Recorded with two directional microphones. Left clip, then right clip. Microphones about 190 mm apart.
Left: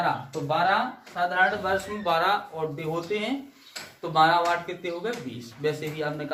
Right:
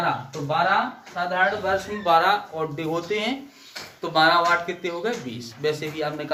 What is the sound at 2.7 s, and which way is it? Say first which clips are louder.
Speech: right 5 dB; 25° right (ahead or behind).